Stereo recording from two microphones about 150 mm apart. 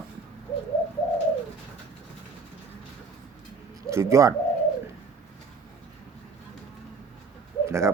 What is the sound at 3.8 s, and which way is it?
Speech, 20° right (ahead or behind).